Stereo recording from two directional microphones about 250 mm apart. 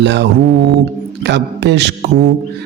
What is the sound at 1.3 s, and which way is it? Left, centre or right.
Speech, right.